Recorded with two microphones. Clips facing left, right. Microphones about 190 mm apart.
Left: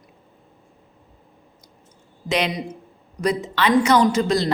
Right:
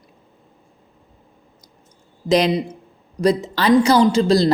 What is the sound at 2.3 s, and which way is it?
A woman's voice, 35° right (ahead or behind).